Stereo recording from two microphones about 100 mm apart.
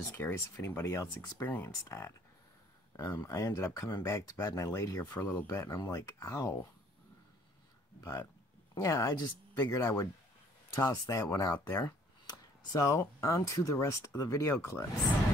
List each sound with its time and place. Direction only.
0.1 s speech: 20° left (ahead or behind)
3.1 s speech: 35° left (ahead or behind)
8.0 s speech: 30° left (ahead or behind)